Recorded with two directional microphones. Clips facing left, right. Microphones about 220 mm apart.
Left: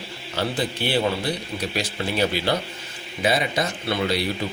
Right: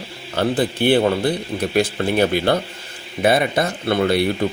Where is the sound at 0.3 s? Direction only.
55° right (ahead or behind).